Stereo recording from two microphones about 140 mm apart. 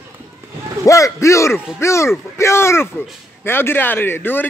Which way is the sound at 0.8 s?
20° left (ahead or behind).